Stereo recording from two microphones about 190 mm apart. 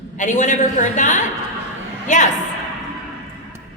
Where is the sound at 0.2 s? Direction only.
40° left (ahead or behind).